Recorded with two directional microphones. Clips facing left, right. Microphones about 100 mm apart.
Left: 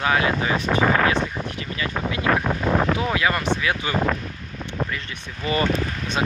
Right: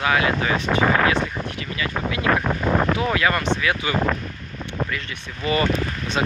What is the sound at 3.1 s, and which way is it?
Speech, 20° left (ahead or behind).